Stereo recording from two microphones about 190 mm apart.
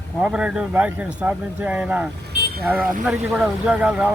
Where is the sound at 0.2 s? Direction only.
5° right (ahead or behind).